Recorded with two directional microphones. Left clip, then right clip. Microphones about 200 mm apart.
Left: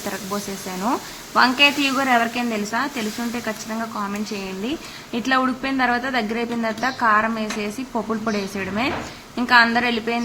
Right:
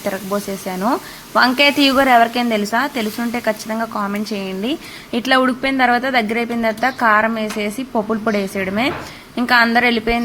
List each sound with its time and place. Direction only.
0.1 s a woman's voice: 20° right (ahead or behind)